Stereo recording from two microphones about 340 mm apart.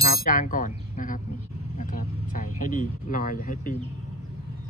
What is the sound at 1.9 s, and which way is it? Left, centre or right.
Vehicle, left.